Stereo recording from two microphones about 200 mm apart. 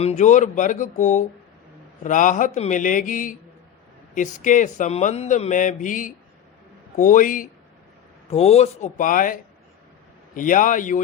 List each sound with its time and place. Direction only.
0.0 s speech: 35° left (ahead or behind)
4.4 s speech: 40° left (ahead or behind)